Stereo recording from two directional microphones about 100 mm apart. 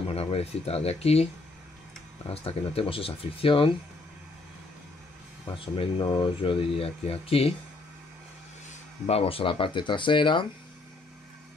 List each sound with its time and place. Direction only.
0.1 s speech: 85° left
2.2 s speech: 75° left (ahead or behind)
5.9 s speech: 45° left (ahead or behind); by 7.5 s 75° left (ahead or behind)
9.0 s speech: 85° left; by 10.4 s 55° left (ahead or behind)